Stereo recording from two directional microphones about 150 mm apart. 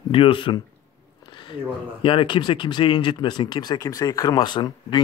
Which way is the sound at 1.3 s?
35° left (ahead or behind).